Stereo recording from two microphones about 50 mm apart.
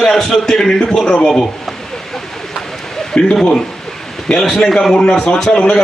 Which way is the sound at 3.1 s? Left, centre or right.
Centre.